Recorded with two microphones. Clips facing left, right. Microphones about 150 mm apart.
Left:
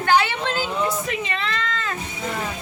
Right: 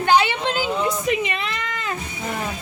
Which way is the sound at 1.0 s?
15° right (ahead or behind).